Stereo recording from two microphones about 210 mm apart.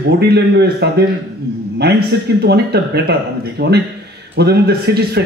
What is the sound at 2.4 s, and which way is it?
A man's voice, 50° right (ahead or behind).